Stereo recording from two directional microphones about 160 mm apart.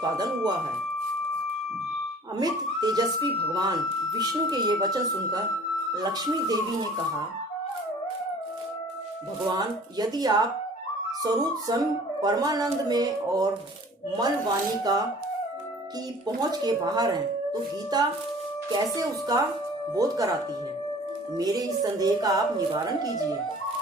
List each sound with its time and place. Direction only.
2.4 s a woman's voice: 25° right (ahead or behind)
9.6 s a woman's voice: 25° right (ahead or behind)
11.7 s a woman's voice: 25° right (ahead or behind)
16.2 s a woman's voice: 25° right (ahead or behind)
21.3 s a woman's voice: 25° right (ahead or behind)